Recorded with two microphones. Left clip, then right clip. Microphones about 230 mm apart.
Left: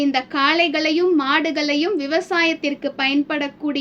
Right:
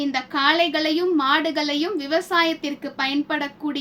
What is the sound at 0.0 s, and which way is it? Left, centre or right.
A woman's voice, centre.